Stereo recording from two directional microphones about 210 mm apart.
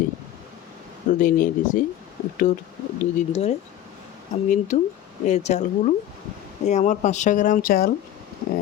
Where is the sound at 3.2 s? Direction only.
30° left (ahead or behind).